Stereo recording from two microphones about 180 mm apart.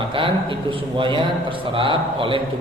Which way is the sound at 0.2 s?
30° right (ahead or behind).